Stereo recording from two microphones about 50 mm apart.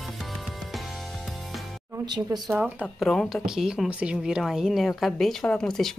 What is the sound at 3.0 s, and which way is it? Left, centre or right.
Speech, centre.